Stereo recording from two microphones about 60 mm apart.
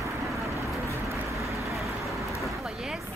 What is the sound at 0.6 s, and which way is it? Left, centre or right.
Vehicle, right.